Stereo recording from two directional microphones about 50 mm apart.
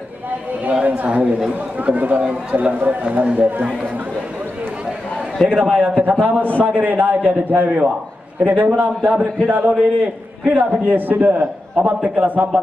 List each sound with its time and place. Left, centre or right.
0.7 s a woman's voice: right
3.0 s a man's voice: right
5.4 s a man's voice: centre
5.8 s a man's voice: right